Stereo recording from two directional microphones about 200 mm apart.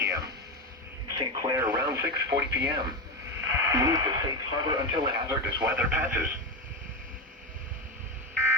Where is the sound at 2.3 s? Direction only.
55° right (ahead or behind).